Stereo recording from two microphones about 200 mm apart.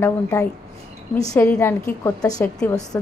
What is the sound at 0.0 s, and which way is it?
A woman's voice, 15° left (ahead or behind).